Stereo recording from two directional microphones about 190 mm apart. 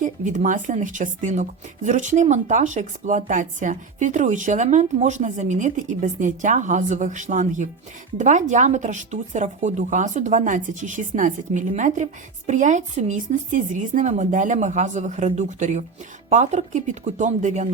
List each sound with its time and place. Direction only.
0.0 s speech: 40° right (ahead or behind)